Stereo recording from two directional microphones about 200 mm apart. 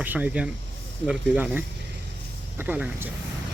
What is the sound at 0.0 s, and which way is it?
Speech, 5° right (ahead or behind).